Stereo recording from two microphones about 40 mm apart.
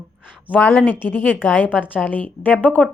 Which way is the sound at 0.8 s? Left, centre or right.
Left.